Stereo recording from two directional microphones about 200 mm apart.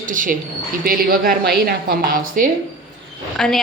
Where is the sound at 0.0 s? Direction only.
40° right (ahead or behind).